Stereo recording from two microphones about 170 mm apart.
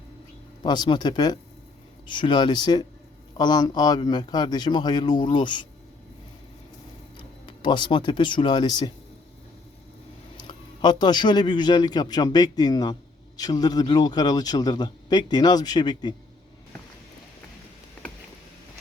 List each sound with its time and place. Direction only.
0.6 s speech: 25° left (ahead or behind)
7.4 s speech: 30° left (ahead or behind)
10.3 s speech: 30° left (ahead or behind)